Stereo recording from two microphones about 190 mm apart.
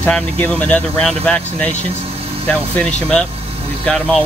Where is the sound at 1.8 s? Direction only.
30° right (ahead or behind).